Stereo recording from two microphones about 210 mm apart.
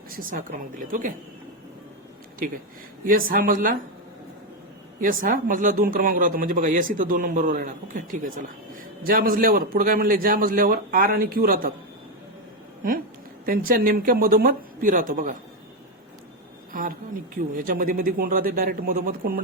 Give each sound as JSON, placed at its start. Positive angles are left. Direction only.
{"t": 0.1, "sound": "speech", "side_deg": -40}
{"t": 3.1, "sound": "speech", "side_deg": -40}
{"t": 4.9, "sound": "a man's voice", "side_deg": -40}
{"t": 13.4, "sound": "a man's voice", "side_deg": -40}
{"t": 17.6, "sound": "a man's voice", "side_deg": -40}